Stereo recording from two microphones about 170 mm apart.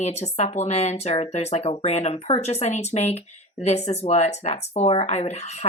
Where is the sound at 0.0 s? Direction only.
40° left (ahead or behind).